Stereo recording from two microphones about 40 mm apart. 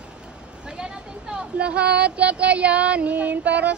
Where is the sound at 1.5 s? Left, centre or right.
Right.